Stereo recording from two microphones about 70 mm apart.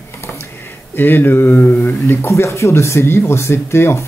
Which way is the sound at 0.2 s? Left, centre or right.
Left.